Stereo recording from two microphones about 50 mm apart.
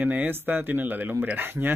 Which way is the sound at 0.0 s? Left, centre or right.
Right.